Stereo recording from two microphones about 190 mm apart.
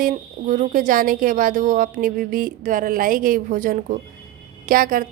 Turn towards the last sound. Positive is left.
turn(degrees=-45)  # may be behind; listen again after turning